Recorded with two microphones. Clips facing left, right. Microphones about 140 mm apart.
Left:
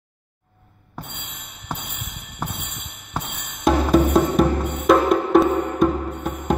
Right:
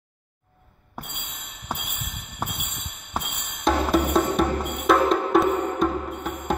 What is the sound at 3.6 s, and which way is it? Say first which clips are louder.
Music: left 4 dB; 5° left (ahead or behind).